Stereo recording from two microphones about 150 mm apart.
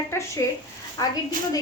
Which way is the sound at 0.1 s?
20° left (ahead or behind).